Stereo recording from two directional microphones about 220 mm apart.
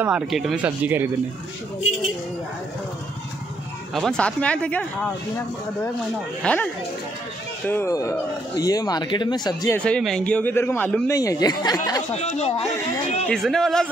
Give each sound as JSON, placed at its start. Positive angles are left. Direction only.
{"t": 0.0, "sound": "speech", "side_deg": -5}
{"t": 3.9, "sound": "speech", "side_deg": 0}
{"t": 9.8, "sound": "speech", "side_deg": 5}
{"t": 11.1, "sound": "speech", "side_deg": 15}
{"t": 12.1, "sound": "speech", "side_deg": 30}
{"t": 13.3, "sound": "speech", "side_deg": 0}